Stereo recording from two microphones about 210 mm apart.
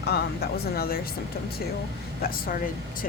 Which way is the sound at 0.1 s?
45° left (ahead or behind).